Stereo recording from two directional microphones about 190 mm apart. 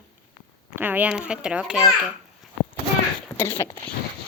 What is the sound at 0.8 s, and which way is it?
A woman's voice, 10° right (ahead or behind).